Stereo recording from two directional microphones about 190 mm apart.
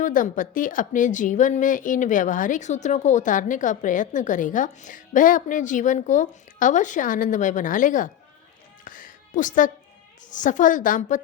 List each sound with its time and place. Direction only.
0.0 s a woman's voice: 45° left (ahead or behind)
8.8 s music: 45° left (ahead or behind)
10.2 s a woman's voice: 40° left (ahead or behind)